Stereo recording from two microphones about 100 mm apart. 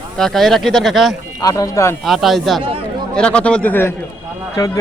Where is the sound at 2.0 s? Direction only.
Centre (ahead or behind).